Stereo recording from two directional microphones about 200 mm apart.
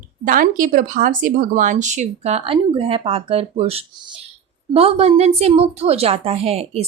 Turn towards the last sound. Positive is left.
turn(degrees=-30)  # may be behind; listen again after turning